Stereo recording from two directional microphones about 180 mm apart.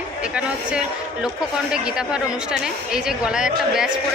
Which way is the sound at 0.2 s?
5° right (ahead or behind).